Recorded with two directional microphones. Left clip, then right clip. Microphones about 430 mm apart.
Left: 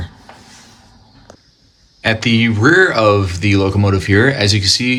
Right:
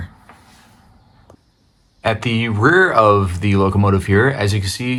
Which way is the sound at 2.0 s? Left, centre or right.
Centre.